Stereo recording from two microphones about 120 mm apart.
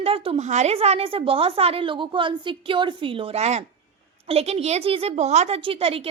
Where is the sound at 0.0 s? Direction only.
55° right (ahead or behind).